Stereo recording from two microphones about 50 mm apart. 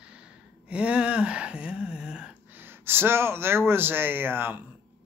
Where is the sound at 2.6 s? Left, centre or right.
Right.